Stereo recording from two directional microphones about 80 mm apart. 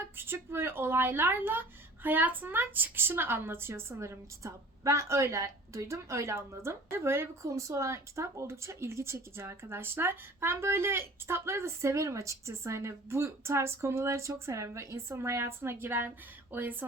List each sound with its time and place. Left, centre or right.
0.2 s a woman's voice: right